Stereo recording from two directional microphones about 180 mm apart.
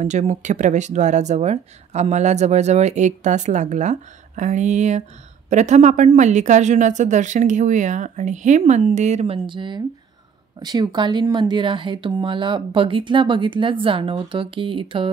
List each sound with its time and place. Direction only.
0.0 s speech: 40° right (ahead or behind)